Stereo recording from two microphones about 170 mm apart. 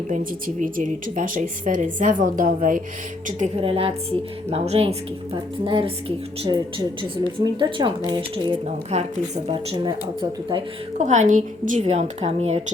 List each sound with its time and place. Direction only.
0.1 s speech: 50° right (ahead or behind); by 7.9 s 30° right (ahead or behind)
8.6 s speech: 40° right (ahead or behind)
10.9 s speech: 45° right (ahead or behind)